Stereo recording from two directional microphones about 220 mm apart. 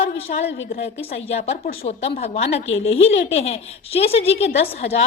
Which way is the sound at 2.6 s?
60° left (ahead or behind).